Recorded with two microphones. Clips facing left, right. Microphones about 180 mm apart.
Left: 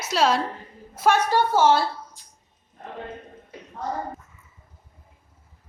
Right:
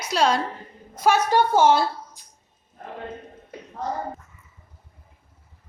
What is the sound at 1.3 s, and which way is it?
Speech, 15° right (ahead or behind).